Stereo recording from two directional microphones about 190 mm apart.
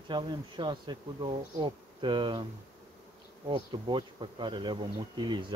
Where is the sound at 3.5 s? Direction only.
25° right (ahead or behind).